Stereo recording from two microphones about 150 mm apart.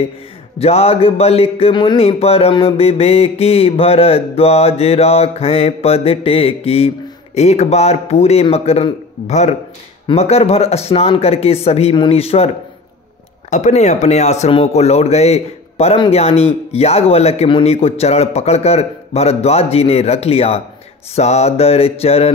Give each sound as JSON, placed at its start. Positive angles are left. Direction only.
{"t": 0.6, "sound": "speech", "side_deg": 45}
{"t": 13.5, "sound": "speech", "side_deg": 50}